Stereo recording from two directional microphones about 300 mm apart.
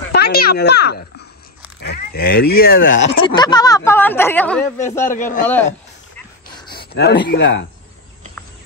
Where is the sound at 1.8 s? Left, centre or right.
Left.